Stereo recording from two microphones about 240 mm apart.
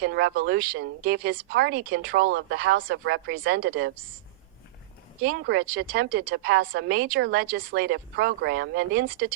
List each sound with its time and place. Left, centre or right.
0.0 s speech: right
5.2 s speech: right